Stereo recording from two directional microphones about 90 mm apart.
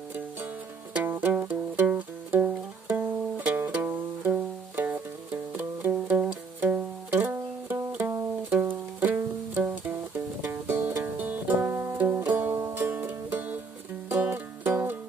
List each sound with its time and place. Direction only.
1.0 s music: 25° right (ahead or behind)